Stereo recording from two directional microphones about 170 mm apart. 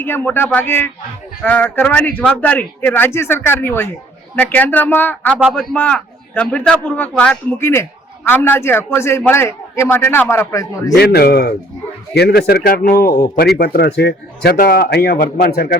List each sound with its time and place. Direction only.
0.0 s a man's voice: 10° left (ahead or behind)
10.9 s a man's voice: 65° left (ahead or behind)
13.6 s a man's voice: 70° left (ahead or behind)